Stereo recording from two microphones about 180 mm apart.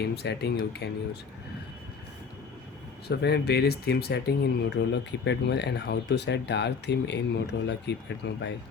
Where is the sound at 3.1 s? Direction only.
70° left (ahead or behind).